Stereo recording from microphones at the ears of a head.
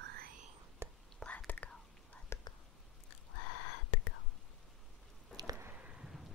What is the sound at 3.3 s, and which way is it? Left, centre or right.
Whispering, left.